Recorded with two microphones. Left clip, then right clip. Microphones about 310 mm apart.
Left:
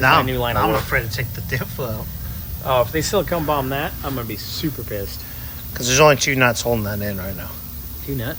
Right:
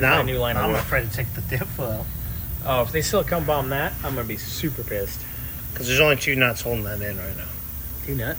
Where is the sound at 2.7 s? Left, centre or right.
Left.